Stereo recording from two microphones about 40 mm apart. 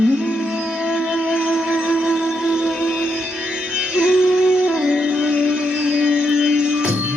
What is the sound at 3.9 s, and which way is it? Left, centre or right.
Music, right.